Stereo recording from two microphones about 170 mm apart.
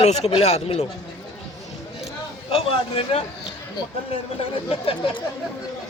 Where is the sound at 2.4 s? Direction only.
35° left (ahead or behind).